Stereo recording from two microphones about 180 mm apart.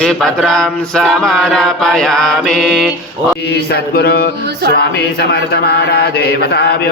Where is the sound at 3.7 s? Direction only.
60° left (ahead or behind).